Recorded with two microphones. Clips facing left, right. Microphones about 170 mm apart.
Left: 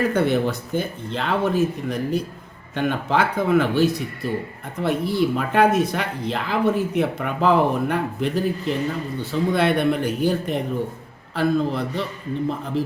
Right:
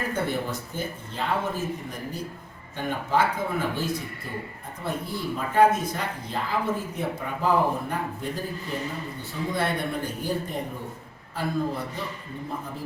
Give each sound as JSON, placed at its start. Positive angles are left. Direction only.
{"t": 0.0, "sound": "speech", "side_deg": 75}